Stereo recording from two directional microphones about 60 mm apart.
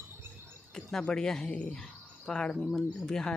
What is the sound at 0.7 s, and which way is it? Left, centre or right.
Speech, centre.